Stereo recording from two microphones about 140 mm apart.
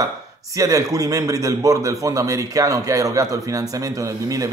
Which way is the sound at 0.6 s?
25° right (ahead or behind).